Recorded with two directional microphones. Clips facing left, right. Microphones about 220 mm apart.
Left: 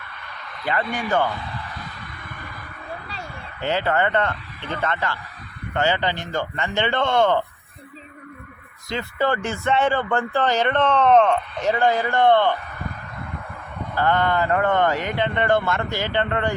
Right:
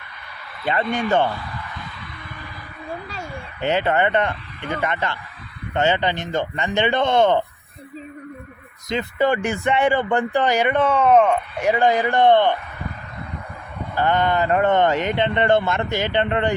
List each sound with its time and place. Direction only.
0.6 s speech: 20° right (ahead or behind)
3.6 s speech: 20° right (ahead or behind)
8.9 s speech: 20° right (ahead or behind)
13.9 s speech: 20° right (ahead or behind)